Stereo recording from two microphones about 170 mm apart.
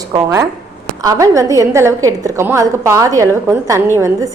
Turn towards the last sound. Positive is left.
turn(degrees=-15)  # may be behind; listen again after turning